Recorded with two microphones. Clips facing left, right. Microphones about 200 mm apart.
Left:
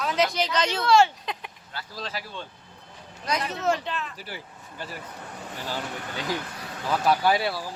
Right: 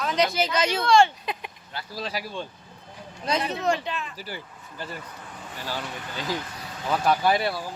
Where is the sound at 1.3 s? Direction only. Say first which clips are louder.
Right 2 dB; 15° right (ahead or behind).